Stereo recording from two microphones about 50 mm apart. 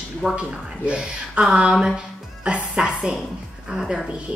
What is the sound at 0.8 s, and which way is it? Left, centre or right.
A woman's voice, right.